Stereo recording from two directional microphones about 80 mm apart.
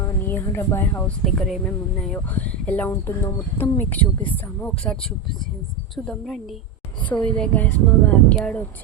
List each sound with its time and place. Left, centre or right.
0.3 s speech: left
1.0 s speech: centre
2.1 s speech: left
2.9 s speech: left
3.6 s speech: left
7.1 s speech: centre